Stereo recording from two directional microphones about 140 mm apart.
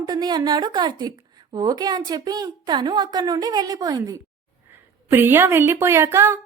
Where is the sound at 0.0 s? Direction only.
30° right (ahead or behind).